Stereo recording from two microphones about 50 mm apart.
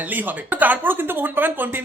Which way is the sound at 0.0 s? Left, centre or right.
Right.